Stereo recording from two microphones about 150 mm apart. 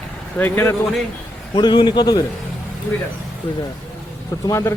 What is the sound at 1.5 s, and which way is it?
Speech, 30° left (ahead or behind).